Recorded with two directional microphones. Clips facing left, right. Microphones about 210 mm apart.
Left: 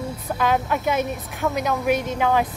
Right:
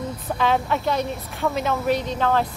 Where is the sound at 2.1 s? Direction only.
10° left (ahead or behind).